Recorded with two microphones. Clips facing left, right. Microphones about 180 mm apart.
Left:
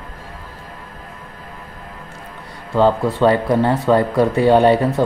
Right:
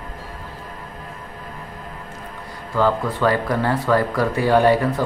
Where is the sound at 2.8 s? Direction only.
25° left (ahead or behind).